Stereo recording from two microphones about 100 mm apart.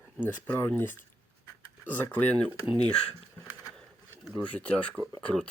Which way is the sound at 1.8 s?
20° left (ahead or behind).